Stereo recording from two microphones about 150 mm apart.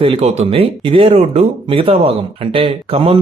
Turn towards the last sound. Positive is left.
turn(degrees=-40)  # may be behind; listen again after turning